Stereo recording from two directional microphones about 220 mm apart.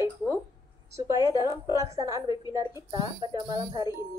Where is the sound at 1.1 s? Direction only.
20° left (ahead or behind).